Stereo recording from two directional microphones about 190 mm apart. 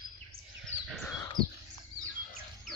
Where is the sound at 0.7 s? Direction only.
10° right (ahead or behind).